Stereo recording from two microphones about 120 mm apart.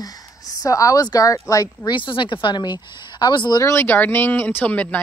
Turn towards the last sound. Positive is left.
turn(degrees=15)  # may be behind; listen again after turning